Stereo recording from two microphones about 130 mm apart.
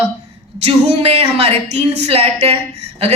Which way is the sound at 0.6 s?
50° right (ahead or behind).